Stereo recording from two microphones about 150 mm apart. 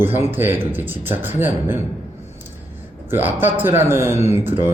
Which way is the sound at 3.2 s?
15° right (ahead or behind).